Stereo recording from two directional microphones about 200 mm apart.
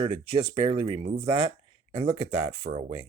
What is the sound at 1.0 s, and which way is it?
Speech, 40° right (ahead or behind).